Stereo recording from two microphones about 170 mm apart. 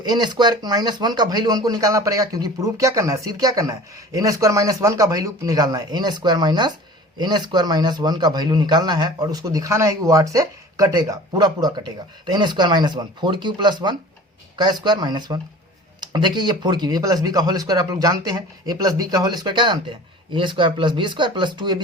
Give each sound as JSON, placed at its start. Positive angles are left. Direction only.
{"t": 0.0, "sound": "speech", "side_deg": -25}